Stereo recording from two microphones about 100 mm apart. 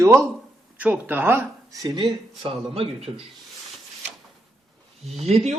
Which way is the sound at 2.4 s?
70° right (ahead or behind).